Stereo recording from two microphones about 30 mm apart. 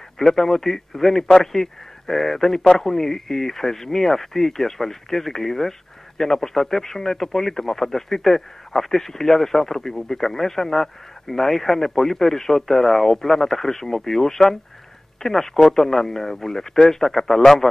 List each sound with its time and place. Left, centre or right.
0.2 s speech: centre